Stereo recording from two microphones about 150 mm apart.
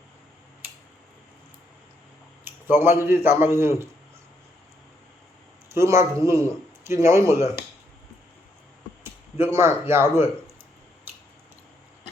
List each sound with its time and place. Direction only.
2.4 s speech: 15° right (ahead or behind)
5.7 s a man's voice: 20° right (ahead or behind)
9.4 s speech: 15° right (ahead or behind)